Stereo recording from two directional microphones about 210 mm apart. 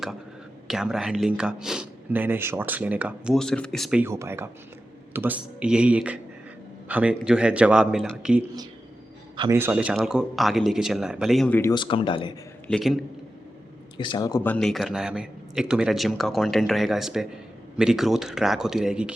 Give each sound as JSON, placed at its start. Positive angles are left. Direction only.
{"t": 0.7, "sound": "speech", "side_deg": 0}
{"t": 4.0, "sound": "speech", "side_deg": -10}
{"t": 9.3, "sound": "a man's voice", "side_deg": -20}
{"t": 9.6, "sound": "speech", "side_deg": -10}
{"t": 11.7, "sound": "speech", "side_deg": 25}
{"t": 12.6, "sound": "speech", "side_deg": 0}
{"t": 13.9, "sound": "speech", "side_deg": 20}